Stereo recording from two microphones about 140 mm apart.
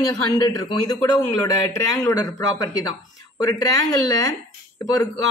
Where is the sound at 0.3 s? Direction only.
30° left (ahead or behind).